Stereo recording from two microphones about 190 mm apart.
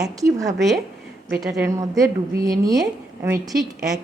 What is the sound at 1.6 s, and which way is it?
A woman's voice, 15° right (ahead or behind).